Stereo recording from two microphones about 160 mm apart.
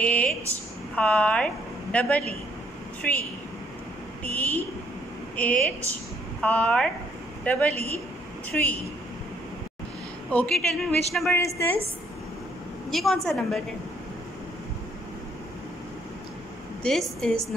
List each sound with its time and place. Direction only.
0.0 s a woman's voice: 10° left (ahead or behind)
10.3 s a woman's voice: 5° left (ahead or behind)
11.3 s a woman's voice: 15° left (ahead or behind)
12.9 s a woman's voice: centre (ahead or behind)
16.8 s a woman's voice: centre (ahead or behind)